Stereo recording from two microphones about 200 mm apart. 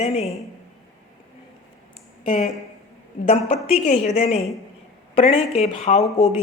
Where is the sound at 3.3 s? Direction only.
35° left (ahead or behind).